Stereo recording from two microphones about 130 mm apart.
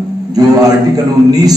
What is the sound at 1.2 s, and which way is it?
Speech, 30° right (ahead or behind).